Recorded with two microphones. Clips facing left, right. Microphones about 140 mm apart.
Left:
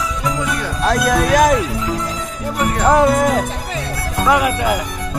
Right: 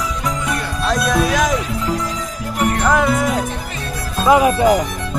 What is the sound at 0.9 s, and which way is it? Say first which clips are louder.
Music: left 2 dB; 50° left (ahead or behind).